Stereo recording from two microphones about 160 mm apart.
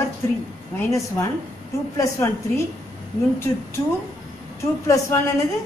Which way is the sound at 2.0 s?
20° left (ahead or behind).